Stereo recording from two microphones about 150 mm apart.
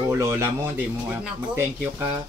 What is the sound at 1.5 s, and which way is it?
Speech, 20° right (ahead or behind).